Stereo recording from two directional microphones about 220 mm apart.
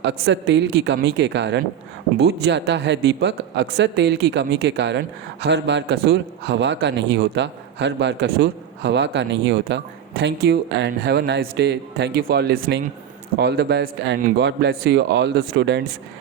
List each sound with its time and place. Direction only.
0.0 s speech: 55° right (ahead or behind)